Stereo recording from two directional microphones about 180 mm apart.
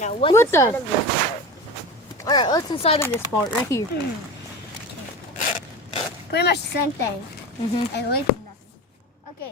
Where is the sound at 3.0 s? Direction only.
10° left (ahead or behind).